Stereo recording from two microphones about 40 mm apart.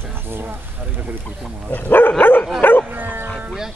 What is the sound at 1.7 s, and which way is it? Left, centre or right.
Dog, left.